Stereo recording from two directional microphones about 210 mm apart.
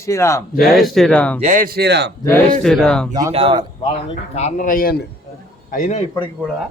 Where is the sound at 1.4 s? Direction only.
35° right (ahead or behind); by 2.1 s 55° right (ahead or behind).